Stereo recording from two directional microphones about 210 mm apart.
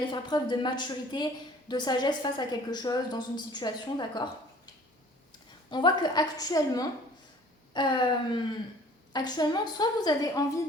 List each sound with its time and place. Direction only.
0.1 s a woman's voice: 20° left (ahead or behind)
5.7 s a woman's voice: 20° left (ahead or behind)